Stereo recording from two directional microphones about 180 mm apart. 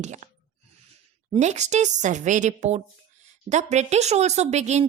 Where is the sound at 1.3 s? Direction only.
40° right (ahead or behind).